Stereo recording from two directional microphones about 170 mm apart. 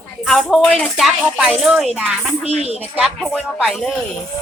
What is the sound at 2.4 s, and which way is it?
Speech, 40° right (ahead or behind).